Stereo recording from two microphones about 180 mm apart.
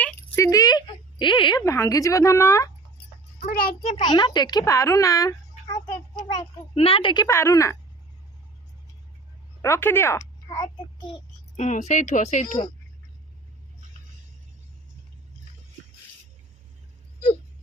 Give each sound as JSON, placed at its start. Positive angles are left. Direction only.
{"t": 0.0, "sound": "a sound", "side_deg": 15}
{"t": 3.4, "sound": "a child's voice", "side_deg": 55}
{"t": 4.1, "sound": "a child's voice", "side_deg": 25}
{"t": 6.3, "sound": "a child's voice", "side_deg": 30}
{"t": 9.6, "sound": "speech", "side_deg": 15}
{"t": 11.1, "sound": "a child's voice", "side_deg": 40}